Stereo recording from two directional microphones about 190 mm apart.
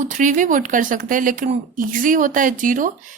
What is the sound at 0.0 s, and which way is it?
Speech, 40° right (ahead or behind).